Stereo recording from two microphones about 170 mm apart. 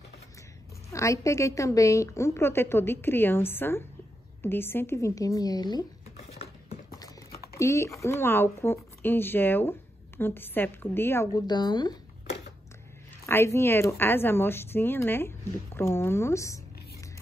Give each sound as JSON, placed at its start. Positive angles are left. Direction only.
{"t": 0.9, "sound": "a woman's voice", "side_deg": 20}
{"t": 7.0, "sound": "speech", "side_deg": 15}
{"t": 13.2, "sound": "speech", "side_deg": 15}